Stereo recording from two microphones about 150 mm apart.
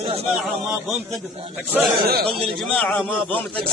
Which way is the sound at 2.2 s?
Centre (ahead or behind).